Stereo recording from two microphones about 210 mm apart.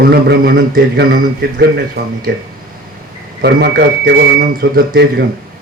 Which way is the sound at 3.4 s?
55° right (ahead or behind).